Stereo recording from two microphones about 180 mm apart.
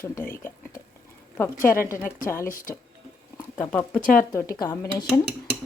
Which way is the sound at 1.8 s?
15° left (ahead or behind).